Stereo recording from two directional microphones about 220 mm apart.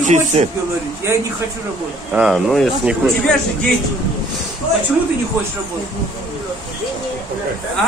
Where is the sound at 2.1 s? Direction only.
5° right (ahead or behind).